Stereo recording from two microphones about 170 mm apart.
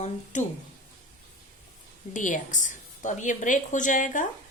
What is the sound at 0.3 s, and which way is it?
Speech, 45° left (ahead or behind).